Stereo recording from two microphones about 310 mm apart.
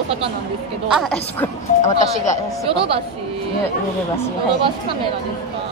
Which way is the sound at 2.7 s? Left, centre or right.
Centre.